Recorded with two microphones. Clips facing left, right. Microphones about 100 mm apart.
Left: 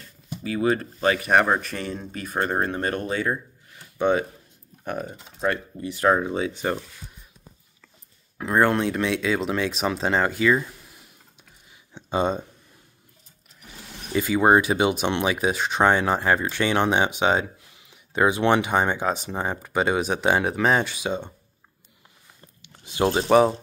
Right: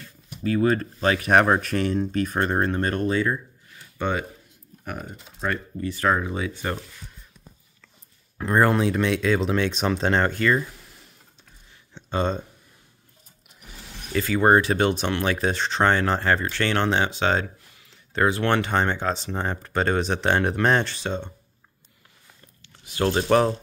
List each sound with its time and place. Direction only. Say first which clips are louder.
0.4 s speech: right 2 dB; 10° left (ahead or behind)
1.0 s speech: right 1 dB; centre (ahead or behind)
4.9 s speech: left 5 dB; 20° left (ahead or behind)
8.4 s speech: even; centre (ahead or behind)
11.9 s speech: left 2 dB; 15° left (ahead or behind)
14.1 s speech: even; 15° left (ahead or behind)
22.6 s a sound: left 2 dB; 20° left (ahead or behind)